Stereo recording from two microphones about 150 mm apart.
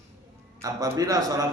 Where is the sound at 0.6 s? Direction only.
25° right (ahead or behind).